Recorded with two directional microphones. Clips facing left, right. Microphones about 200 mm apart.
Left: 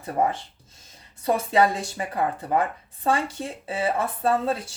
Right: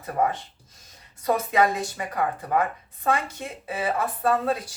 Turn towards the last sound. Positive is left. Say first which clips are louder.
# even
turn(degrees=25)  # may be behind; listen again after turning